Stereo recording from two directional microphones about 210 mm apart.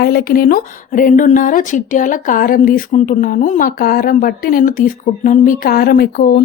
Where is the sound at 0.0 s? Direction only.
45° left (ahead or behind).